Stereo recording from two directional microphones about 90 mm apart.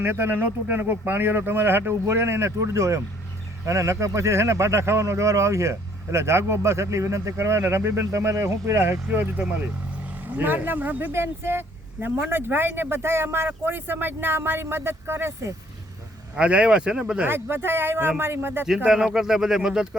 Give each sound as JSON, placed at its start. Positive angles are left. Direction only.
{"t": 0.0, "sound": "speech", "side_deg": -25}
{"t": 10.3, "sound": "speech", "side_deg": -20}
{"t": 16.3, "sound": "speech", "side_deg": -15}
{"t": 17.2, "sound": "speech", "side_deg": -25}
{"t": 18.9, "sound": "speech", "side_deg": -5}